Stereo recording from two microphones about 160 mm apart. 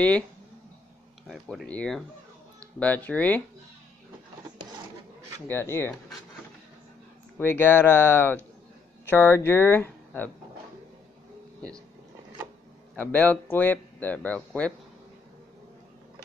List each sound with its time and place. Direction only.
1.2 s speech: centre (ahead or behind)
5.5 s speech: 15° left (ahead or behind)
7.3 s speech: 15° left (ahead or behind)
12.9 s speech: 10° left (ahead or behind)